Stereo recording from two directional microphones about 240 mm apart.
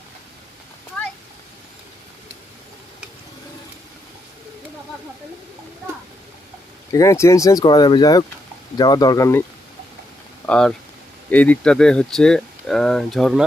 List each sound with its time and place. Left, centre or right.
6.9 s speech: centre
10.4 s speech: centre